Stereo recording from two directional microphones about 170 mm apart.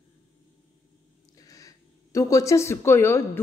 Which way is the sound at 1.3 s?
20° left (ahead or behind).